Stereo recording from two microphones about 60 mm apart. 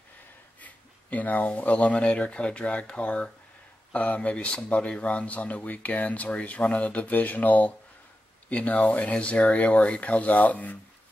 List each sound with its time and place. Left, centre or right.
0.6 s speech: left